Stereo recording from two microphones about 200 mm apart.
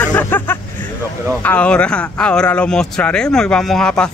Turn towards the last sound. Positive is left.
turn(degrees=5)  # may be behind; listen again after turning